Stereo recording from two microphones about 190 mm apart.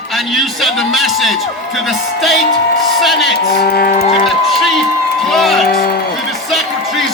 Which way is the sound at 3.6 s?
55° left (ahead or behind).